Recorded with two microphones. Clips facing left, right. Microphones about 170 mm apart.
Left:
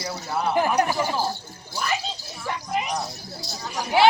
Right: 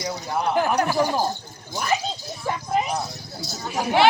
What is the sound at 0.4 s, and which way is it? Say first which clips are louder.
Speech: even; 5° left (ahead or behind).